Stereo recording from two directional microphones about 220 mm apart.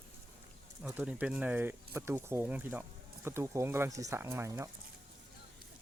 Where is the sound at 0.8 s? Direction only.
5° right (ahead or behind).